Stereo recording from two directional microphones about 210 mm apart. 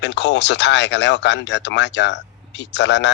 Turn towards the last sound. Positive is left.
turn(degrees=55)  # may be behind; listen again after turning